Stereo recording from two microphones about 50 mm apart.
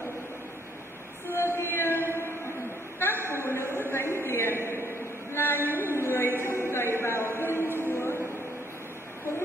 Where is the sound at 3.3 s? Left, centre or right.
Left.